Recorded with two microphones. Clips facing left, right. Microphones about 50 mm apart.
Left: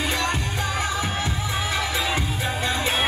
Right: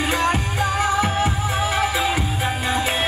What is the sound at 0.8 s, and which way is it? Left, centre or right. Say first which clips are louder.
Music: right 6 dB; right.